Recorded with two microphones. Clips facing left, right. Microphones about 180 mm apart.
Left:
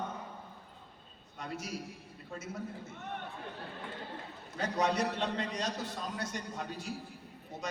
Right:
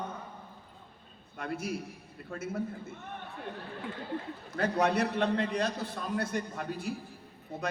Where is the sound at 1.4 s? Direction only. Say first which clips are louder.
Right 5 dB; 55° right (ahead or behind).